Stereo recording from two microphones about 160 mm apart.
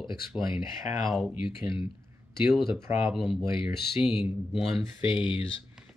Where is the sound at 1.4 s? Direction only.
35° left (ahead or behind).